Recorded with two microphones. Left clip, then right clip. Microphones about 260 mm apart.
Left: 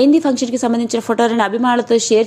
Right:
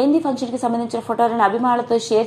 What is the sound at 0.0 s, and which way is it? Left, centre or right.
A woman's voice, left.